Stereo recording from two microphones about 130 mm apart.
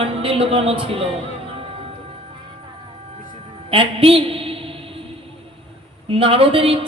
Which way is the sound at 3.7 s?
45° right (ahead or behind).